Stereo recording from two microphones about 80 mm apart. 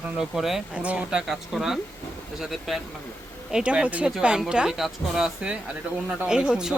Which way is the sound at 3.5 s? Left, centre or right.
Centre.